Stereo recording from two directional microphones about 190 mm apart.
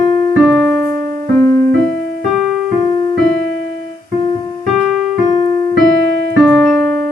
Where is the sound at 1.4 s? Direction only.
15° left (ahead or behind).